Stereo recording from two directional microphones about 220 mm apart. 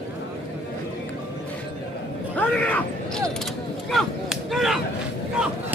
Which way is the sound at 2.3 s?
5° left (ahead or behind).